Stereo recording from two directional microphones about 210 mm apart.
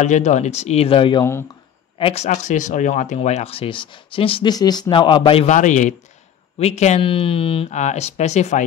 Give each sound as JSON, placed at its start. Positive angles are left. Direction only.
{"t": 0.0, "sound": "speech", "side_deg": 35}